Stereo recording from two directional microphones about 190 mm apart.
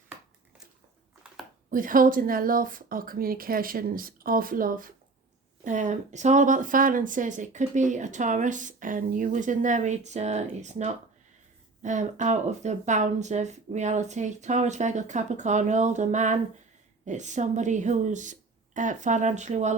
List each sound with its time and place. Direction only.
1.7 s a woman's voice: 45° right (ahead or behind)